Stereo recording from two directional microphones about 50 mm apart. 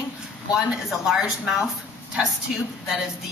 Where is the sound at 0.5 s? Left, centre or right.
Centre.